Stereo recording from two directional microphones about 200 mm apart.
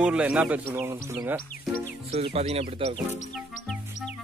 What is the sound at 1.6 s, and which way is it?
Music, 5° left (ahead or behind).